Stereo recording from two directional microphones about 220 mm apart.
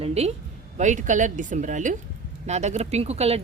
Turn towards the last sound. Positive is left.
turn(degrees=-30)  # may be behind; listen again after turning